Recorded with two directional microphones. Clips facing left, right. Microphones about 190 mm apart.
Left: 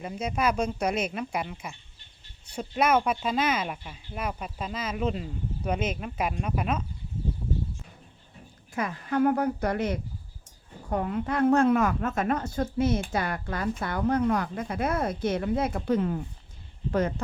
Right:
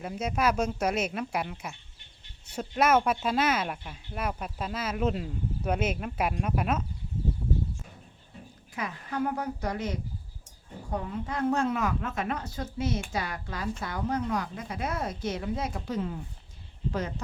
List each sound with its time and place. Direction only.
0.0 s speech: centre (ahead or behind)
8.7 s a woman's voice: 55° left (ahead or behind)